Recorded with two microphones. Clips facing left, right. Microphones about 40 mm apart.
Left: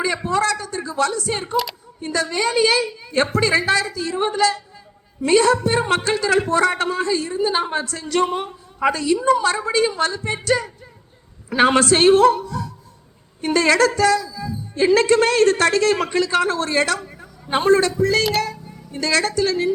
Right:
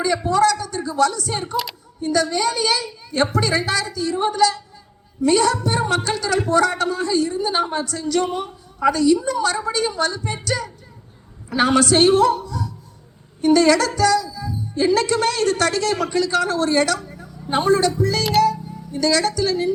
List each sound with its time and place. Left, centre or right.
0.0 s speech: left